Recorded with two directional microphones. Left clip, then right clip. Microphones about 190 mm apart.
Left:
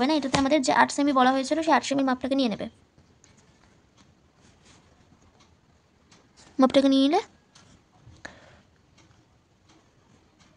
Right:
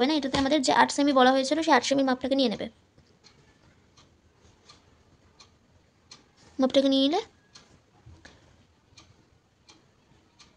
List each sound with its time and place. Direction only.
0.0 s speech: 45° left (ahead or behind)
6.6 s speech: 50° left (ahead or behind)